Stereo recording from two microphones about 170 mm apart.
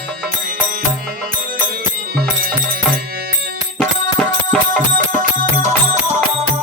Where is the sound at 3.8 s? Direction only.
5° left (ahead or behind).